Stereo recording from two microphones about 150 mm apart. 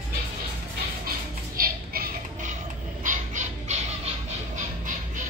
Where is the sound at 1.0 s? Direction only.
75° right (ahead or behind).